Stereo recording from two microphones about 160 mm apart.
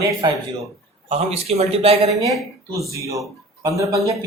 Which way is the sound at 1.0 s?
40° right (ahead or behind).